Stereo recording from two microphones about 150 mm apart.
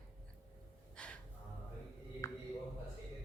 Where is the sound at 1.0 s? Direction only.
5° left (ahead or behind).